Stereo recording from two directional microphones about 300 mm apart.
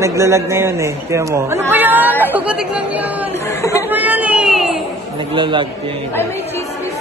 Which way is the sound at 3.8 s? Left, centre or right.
Centre.